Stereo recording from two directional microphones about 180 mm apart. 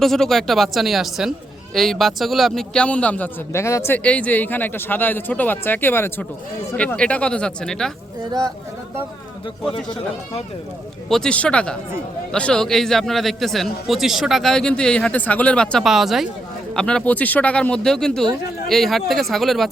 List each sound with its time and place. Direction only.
0.0 s a man's voice: centre (ahead or behind)
8.2 s speech: 20° right (ahead or behind)
11.1 s a man's voice: 5° left (ahead or behind)